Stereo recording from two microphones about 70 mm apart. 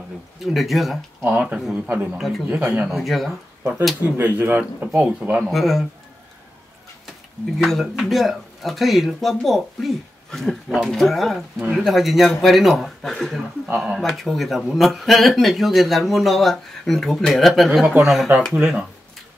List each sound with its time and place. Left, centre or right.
0.4 s speech: centre
1.2 s speech: right
2.0 s speech: centre
2.4 s speech: right
2.9 s speech: centre
4.2 s speech: right
5.4 s speech: centre
7.1 s speech: centre